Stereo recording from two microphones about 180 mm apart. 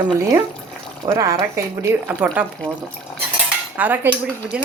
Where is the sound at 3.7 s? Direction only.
10° right (ahead or behind).